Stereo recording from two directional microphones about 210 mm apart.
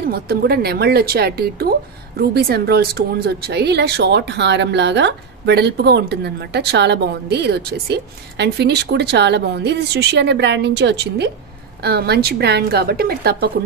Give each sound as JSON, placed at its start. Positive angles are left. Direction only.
{"t": 0.1, "sound": "a woman's voice", "side_deg": -50}